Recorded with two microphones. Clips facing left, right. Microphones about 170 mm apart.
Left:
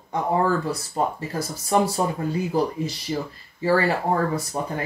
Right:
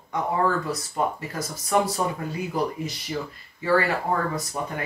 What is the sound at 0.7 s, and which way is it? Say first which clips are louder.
Speech: left 2 dB; 30° left (ahead or behind).